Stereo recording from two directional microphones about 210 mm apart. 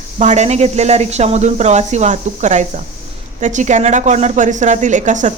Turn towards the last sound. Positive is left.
turn(degrees=-35)  # may be behind; listen again after turning